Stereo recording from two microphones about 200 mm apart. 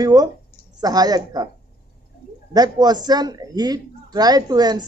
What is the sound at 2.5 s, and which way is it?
A man's voice, 20° right (ahead or behind).